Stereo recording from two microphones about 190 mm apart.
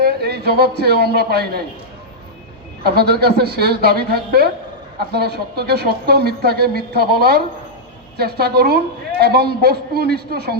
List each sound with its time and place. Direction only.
0.0 s speech: 55° right (ahead or behind)
2.8 s a woman's voice: 55° right (ahead or behind)